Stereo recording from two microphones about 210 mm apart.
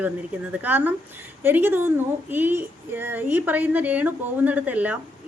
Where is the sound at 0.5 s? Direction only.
5° right (ahead or behind).